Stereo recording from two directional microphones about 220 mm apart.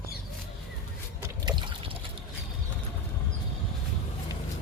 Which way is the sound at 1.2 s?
20° right (ahead or behind).